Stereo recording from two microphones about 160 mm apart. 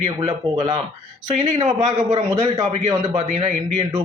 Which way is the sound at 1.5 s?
45° right (ahead or behind).